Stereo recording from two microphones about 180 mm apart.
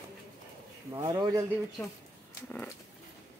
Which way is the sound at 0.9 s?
25° right (ahead or behind).